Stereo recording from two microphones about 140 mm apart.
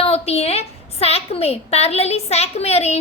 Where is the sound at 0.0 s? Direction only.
45° left (ahead or behind).